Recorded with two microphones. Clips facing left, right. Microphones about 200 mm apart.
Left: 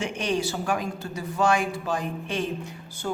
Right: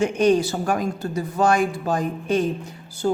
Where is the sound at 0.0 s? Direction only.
40° right (ahead or behind).